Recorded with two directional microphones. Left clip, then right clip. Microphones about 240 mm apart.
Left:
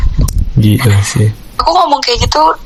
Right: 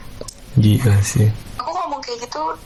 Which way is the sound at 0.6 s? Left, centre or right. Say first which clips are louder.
Left 5 dB; centre.